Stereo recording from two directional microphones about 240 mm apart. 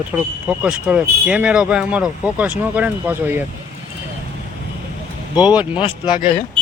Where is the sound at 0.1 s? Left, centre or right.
Centre.